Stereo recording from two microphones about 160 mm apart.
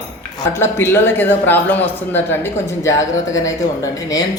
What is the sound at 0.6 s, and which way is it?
Speech, 15° left (ahead or behind).